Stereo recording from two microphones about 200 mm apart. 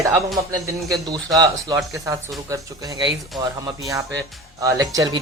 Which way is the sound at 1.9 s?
15° right (ahead or behind).